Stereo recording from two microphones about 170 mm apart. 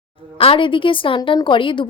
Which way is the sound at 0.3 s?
30° left (ahead or behind).